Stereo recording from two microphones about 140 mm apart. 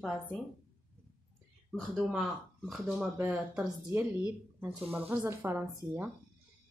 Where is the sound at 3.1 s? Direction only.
10° right (ahead or behind).